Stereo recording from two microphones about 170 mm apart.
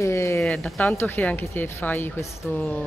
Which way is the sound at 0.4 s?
Centre (ahead or behind).